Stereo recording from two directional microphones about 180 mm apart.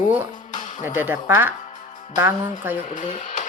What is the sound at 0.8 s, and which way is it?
A woman's voice, 10° right (ahead or behind).